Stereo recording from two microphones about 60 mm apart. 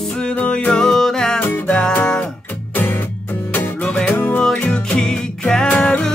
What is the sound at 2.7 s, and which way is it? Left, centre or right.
Music, left.